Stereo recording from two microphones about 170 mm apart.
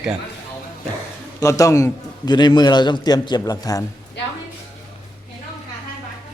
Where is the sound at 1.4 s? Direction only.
15° left (ahead or behind).